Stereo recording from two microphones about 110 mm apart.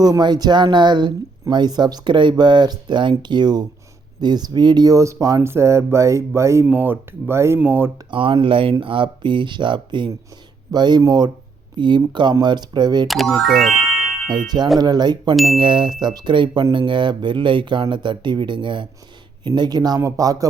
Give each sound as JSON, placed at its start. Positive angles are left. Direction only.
{"t": 0.0, "sound": "speech", "side_deg": -40}
{"t": 8.1, "sound": "speech", "side_deg": -50}
{"t": 13.1, "sound": "speech", "side_deg": 0}
{"t": 14.3, "sound": "speech", "side_deg": -40}